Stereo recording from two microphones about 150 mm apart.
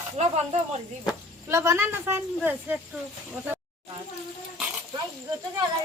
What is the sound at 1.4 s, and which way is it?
A woman's voice, 20° right (ahead or behind).